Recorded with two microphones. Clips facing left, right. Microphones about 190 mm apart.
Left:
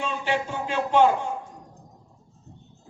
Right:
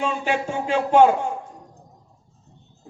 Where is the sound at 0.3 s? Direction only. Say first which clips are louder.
Right 2 dB; 50° right (ahead or behind).